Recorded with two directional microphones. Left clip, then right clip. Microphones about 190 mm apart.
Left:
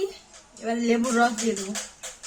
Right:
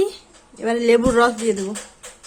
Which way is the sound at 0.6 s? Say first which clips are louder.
Right 9 dB; 60° right (ahead or behind).